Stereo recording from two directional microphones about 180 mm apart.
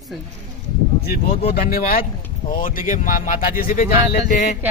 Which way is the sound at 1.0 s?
60° left (ahead or behind).